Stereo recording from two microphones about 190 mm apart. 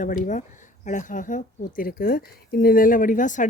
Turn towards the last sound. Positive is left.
turn(degrees=40)  # may be behind; listen again after turning